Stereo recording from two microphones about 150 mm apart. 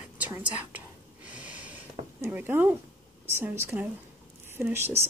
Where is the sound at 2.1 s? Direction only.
10° right (ahead or behind).